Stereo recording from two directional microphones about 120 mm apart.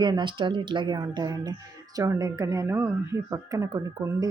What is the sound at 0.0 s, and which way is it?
A woman's voice, 40° right (ahead or behind).